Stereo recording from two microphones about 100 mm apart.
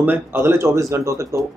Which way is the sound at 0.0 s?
20° right (ahead or behind).